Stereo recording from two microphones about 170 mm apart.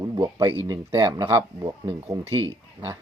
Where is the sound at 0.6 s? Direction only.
20° right (ahead or behind).